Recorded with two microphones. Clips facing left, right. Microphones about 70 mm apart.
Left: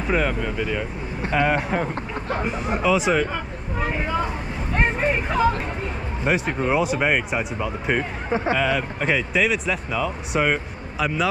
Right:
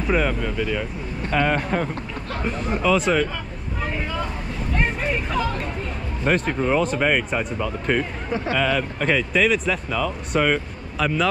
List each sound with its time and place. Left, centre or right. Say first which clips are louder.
0.0 s speech: right 1 dB; centre
3.8 s vehicle: left 3 dB; centre
4.7 s hubbub: left 3 dB; centre
6.2 s speech: right 1 dB; centre